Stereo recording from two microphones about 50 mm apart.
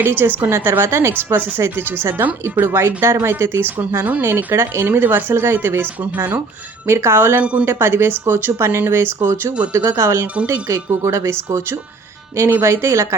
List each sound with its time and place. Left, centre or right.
0.0 s a woman's voice: right
1.1 s a woman's voice: right
2.6 s speech: right
2.8 s a woman's voice: right
4.6 s a woman's voice: right
6.8 s a woman's voice: right
9.7 s speech: right